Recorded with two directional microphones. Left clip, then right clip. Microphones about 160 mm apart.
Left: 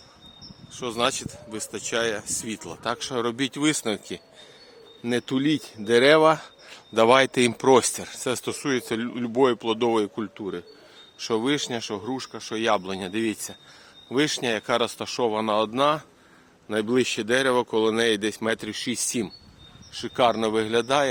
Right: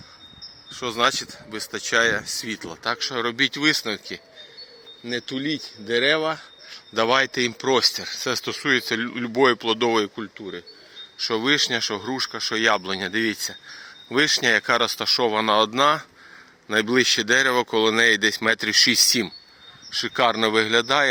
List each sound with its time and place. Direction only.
0.8 s speech: 10° left (ahead or behind)
5.0 s speech: 50° left (ahead or behind)
6.9 s speech: 25° left (ahead or behind); by 10.1 s 10° left (ahead or behind)
10.3 s speech: 35° left (ahead or behind)
11.5 s speech: 10° left (ahead or behind); by 19.0 s 10° right (ahead or behind)
19.9 s speech: centre (ahead or behind)